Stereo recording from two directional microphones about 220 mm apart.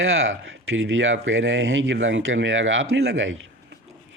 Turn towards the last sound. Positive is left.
turn(degrees=-60)  # may be behind; listen again after turning